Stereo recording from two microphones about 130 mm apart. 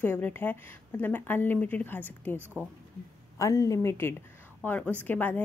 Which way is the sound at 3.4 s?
25° left (ahead or behind).